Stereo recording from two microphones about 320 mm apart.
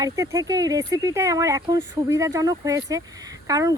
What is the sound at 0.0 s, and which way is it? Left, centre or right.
Speech, centre.